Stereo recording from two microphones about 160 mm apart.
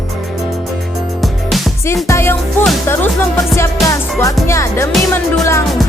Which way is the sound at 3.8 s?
20° left (ahead or behind).